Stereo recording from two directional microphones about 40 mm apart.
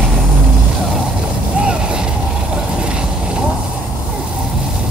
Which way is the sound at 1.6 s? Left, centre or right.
Right.